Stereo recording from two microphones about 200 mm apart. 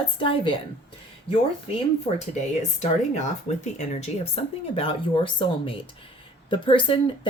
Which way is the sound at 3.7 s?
35° left (ahead or behind).